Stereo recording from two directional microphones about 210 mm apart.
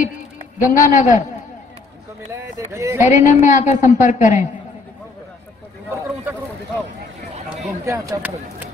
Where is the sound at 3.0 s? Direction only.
35° left (ahead or behind).